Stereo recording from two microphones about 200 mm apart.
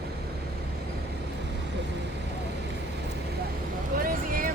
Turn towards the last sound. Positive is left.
turn(degrees=-45)  # may be behind; listen again after turning